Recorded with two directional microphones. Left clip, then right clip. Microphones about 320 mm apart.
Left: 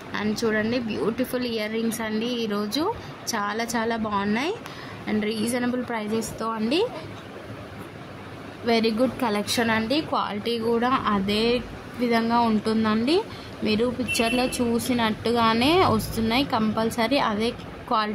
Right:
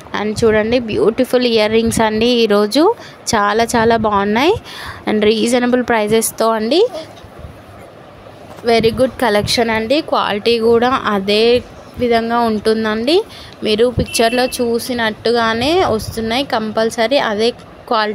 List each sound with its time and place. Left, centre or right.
0.1 s speech: right
8.6 s speech: centre